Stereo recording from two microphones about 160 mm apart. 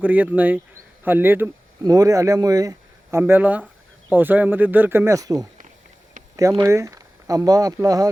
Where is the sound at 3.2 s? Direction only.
10° right (ahead or behind).